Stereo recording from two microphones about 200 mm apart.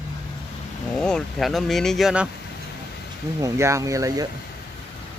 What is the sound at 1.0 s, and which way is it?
Speech, centre (ahead or behind).